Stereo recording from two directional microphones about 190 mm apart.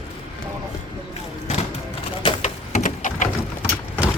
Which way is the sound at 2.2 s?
40° left (ahead or behind).